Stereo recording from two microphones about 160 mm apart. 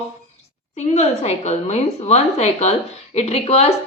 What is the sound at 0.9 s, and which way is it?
A woman's voice, 40° left (ahead or behind).